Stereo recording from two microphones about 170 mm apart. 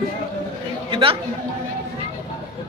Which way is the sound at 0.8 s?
30° right (ahead or behind).